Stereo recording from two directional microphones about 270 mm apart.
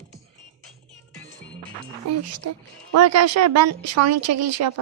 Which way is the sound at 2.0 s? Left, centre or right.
Right.